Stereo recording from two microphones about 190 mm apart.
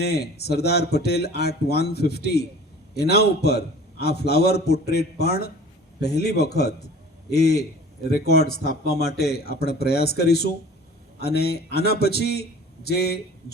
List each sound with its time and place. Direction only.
0.0 s speech: 60° left (ahead or behind)